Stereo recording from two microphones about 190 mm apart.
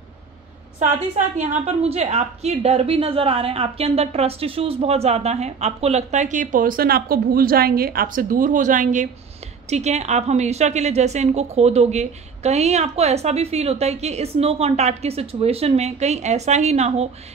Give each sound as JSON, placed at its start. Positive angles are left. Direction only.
{"t": 0.7, "sound": "a woman's voice", "side_deg": -40}